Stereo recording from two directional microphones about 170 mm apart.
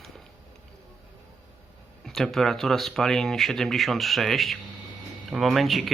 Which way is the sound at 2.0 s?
Centre (ahead or behind).